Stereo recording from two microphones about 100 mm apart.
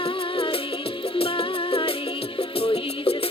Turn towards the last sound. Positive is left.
turn(degrees=80)